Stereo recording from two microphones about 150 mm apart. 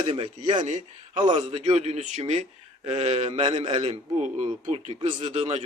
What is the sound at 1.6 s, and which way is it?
A man's voice, 45° right (ahead or behind).